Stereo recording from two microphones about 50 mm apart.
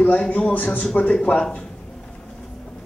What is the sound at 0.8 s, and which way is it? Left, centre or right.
Speech, left.